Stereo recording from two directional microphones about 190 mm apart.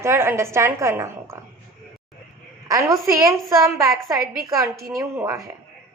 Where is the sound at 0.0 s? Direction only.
15° right (ahead or behind).